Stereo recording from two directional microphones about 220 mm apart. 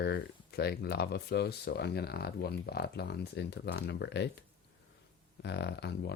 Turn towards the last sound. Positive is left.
turn(degrees=50)  # may be behind; listen again after turning